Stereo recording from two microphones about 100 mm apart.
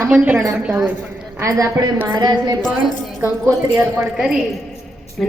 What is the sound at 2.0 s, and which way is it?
Speech, 40° right (ahead or behind).